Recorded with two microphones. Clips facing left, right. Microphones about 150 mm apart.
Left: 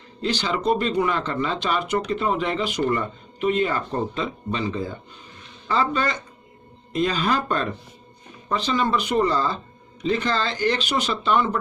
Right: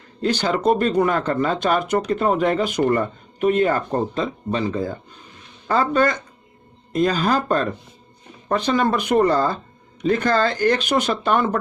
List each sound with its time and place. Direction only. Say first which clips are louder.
0.2 s speech: right 4 dB; 50° right (ahead or behind)
8.4 s speech: right 4 dB; 50° right (ahead or behind)